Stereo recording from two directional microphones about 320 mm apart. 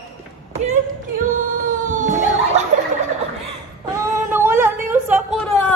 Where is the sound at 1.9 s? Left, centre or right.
Right.